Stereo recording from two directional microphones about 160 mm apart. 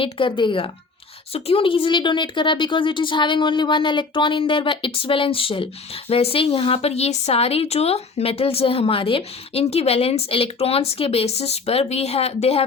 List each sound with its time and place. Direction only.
0.0 s speech: 30° left (ahead or behind)